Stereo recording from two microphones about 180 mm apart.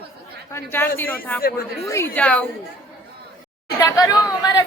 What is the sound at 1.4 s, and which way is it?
Speech, 55° left (ahead or behind).